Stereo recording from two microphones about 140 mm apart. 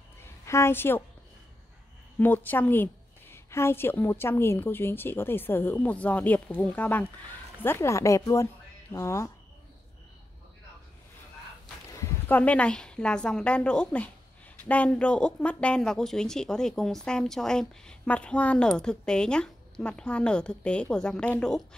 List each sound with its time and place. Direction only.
0.5 s speech: 20° left (ahead or behind)
2.1 s speech: 15° left (ahead or behind)
12.0 s speech: 15° left (ahead or behind)